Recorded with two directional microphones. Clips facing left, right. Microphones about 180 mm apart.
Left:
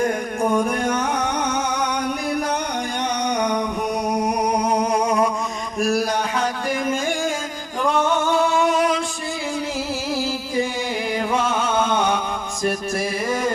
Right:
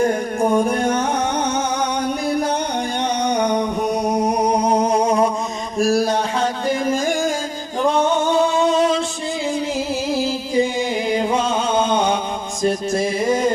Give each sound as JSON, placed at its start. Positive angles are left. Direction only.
{"t": 0.0, "sound": "music", "side_deg": -30}
{"t": 3.2, "sound": "a sound", "side_deg": -30}
{"t": 4.4, "sound": "music", "side_deg": -30}
{"t": 5.8, "sound": "a sound", "side_deg": -30}
{"t": 7.0, "sound": "music", "side_deg": -40}
{"t": 7.8, "sound": "male singing", "side_deg": -20}
{"t": 10.1, "sound": "music", "side_deg": -20}